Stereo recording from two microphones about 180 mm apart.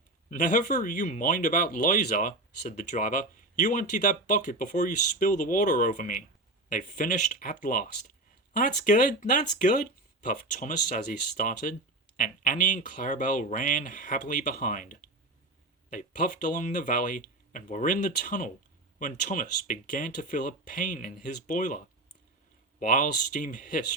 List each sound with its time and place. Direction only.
0.3 s speech: 45° left (ahead or behind)
22.8 s speech: 50° left (ahead or behind)